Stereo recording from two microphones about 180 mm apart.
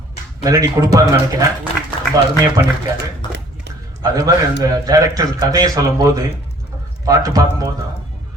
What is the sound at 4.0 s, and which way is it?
A man's voice, 20° right (ahead or behind).